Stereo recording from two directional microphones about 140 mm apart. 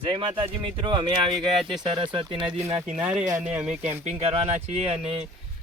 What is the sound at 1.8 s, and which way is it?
Speech, 35° right (ahead or behind).